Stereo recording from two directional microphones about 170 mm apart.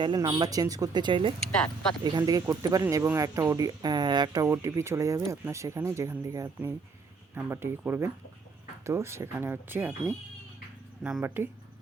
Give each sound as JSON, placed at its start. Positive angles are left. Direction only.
{"t": 0.0, "sound": "speech", "side_deg": -25}